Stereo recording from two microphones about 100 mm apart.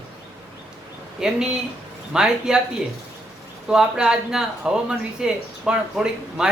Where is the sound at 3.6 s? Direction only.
5° right (ahead or behind).